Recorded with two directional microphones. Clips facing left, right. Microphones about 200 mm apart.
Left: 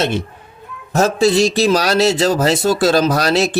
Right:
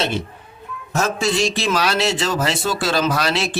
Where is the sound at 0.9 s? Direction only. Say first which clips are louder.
Left 7 dB; 35° left (ahead or behind).